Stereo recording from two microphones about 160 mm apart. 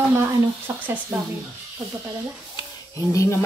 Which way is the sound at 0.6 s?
10° right (ahead or behind).